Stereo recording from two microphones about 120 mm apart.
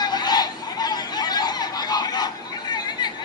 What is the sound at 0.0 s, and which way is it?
Chatter, 35° left (ahead or behind).